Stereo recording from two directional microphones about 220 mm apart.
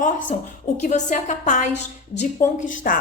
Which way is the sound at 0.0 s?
35° left (ahead or behind).